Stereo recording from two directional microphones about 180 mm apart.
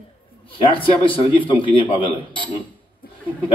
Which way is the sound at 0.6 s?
30° left (ahead or behind).